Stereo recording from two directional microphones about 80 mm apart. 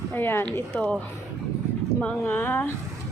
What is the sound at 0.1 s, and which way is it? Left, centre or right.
Speech, left.